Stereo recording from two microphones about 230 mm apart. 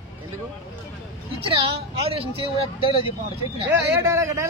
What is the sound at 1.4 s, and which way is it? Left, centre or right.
Speech, right.